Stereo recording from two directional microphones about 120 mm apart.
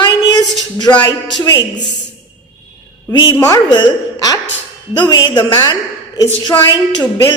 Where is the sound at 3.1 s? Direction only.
35° left (ahead or behind).